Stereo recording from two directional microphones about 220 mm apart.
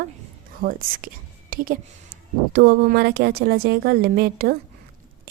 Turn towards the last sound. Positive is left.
turn(degrees=-45)  # may be behind; listen again after turning